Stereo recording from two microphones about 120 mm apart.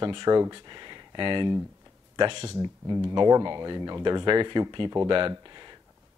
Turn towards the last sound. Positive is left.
turn(degrees=-40)  # may be behind; listen again after turning